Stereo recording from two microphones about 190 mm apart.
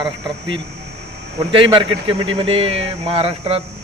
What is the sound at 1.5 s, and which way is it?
Speech, 25° right (ahead or behind).